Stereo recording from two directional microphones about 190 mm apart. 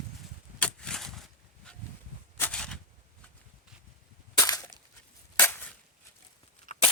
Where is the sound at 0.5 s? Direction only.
5° left (ahead or behind).